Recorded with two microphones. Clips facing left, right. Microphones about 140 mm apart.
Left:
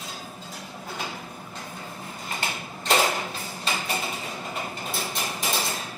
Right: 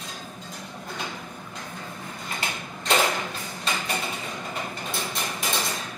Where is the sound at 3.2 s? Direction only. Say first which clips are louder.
Even; 35° left (ahead or behind).